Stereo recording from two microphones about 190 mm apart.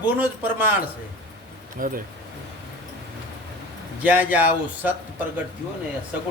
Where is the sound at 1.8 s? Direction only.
45° right (ahead or behind).